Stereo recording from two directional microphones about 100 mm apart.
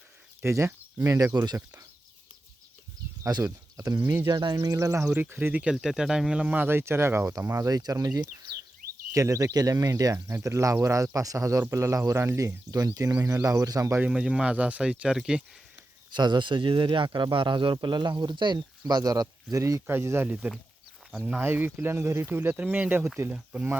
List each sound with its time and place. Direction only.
0.4 s speech: 25° right (ahead or behind)
3.2 s speech: 35° right (ahead or behind)
4.3 s speech: 45° right (ahead or behind)
5.0 s speech: 15° right (ahead or behind)
5.7 s speech: 5° right (ahead or behind); by 7.7 s 30° right (ahead or behind)
7.7 s speech: 40° right (ahead or behind)
14.1 s speech: 10° right (ahead or behind)
16.1 s speech: 45° right (ahead or behind)
17.1 s speech: 40° right (ahead or behind)
17.3 s speech: 55° right (ahead or behind); by 23.6 s 10° right (ahead or behind)